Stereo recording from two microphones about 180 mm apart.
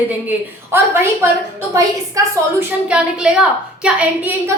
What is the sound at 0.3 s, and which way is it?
A woman's voice, 15° right (ahead or behind).